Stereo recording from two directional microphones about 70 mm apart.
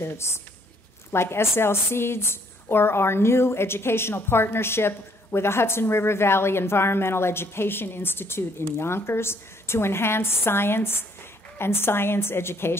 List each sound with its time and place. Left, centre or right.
0.0 s a woman's voice: left